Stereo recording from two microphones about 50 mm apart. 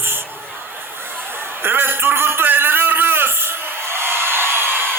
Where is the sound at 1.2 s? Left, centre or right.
Right.